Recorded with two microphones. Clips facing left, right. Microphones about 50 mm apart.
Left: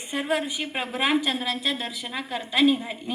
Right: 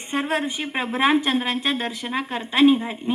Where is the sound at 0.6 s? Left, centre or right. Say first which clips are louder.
Right 5 dB; right.